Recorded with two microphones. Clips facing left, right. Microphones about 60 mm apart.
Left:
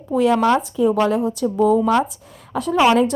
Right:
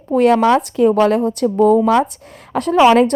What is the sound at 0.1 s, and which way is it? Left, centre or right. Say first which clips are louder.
A woman's voice: right 4 dB; right.